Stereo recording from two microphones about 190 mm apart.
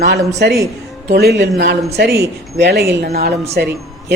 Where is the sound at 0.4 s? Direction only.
60° right (ahead or behind).